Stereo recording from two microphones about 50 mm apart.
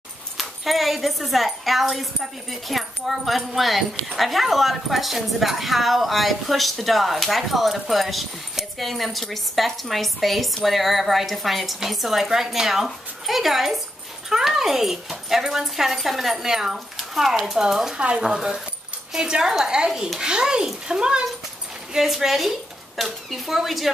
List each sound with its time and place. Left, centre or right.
0.4 s speech: centre
17.9 s a child's voice: right
21.9 s speech: centre